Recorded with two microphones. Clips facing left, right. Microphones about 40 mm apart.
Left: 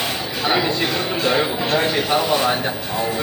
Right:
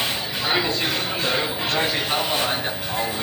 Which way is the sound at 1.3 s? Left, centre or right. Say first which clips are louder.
Left 5 dB; centre.